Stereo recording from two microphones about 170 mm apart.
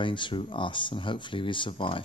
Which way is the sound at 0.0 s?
30° left (ahead or behind).